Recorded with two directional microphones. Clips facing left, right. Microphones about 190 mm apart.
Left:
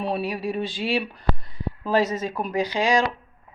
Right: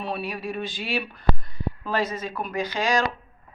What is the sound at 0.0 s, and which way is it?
Speech, 35° left (ahead or behind).